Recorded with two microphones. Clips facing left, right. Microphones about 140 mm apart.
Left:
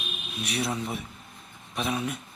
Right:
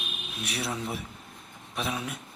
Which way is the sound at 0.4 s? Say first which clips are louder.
Left 3 dB; 5° right (ahead or behind).